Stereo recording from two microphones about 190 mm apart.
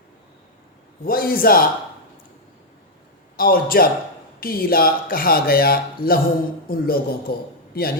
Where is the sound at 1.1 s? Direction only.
50° left (ahead or behind).